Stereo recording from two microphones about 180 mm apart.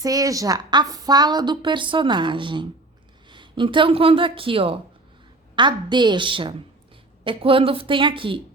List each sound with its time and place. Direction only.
0.0 s a woman's voice: 20° right (ahead or behind)